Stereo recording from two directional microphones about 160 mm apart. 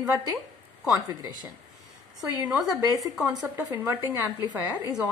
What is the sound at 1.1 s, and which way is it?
Speech, 25° right (ahead or behind).